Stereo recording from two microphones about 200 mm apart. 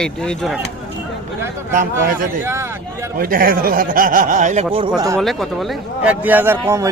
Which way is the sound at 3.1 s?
50° right (ahead or behind).